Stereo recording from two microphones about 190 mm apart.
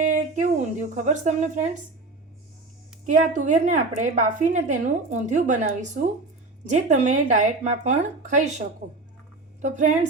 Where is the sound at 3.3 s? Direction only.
40° right (ahead or behind).